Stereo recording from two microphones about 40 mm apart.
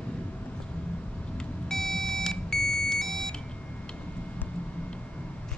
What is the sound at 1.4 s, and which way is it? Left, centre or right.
Beep, centre.